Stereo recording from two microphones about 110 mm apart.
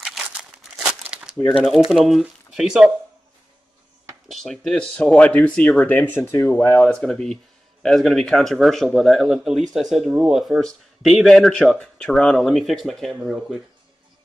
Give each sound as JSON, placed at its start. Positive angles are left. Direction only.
{"t": 0.0, "sound": "crumpling", "side_deg": -5}
{"t": 1.9, "sound": "speech", "side_deg": 0}
{"t": 4.3, "sound": "speech", "side_deg": 5}
{"t": 5.9, "sound": "speech", "side_deg": 20}
{"t": 6.8, "sound": "speech", "side_deg": 5}